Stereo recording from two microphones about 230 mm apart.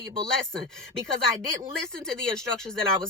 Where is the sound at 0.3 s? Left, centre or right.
Centre.